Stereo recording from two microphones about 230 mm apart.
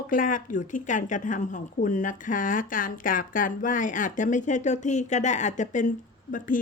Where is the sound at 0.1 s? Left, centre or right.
Left.